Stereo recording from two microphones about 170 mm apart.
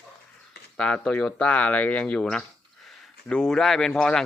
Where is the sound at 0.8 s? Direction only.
5° left (ahead or behind).